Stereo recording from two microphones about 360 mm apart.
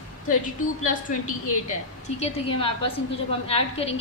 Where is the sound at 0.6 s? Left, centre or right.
Left.